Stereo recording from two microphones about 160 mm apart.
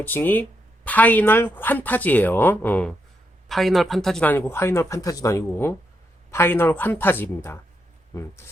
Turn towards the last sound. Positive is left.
turn(degrees=15)  # may be behind; listen again after turning